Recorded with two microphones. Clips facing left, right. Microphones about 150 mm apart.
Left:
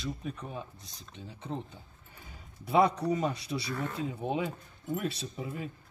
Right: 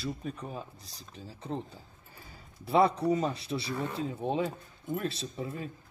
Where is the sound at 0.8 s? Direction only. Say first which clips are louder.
Even; 35° right (ahead or behind).